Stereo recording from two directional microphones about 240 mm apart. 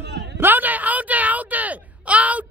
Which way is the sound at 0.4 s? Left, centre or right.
Centre.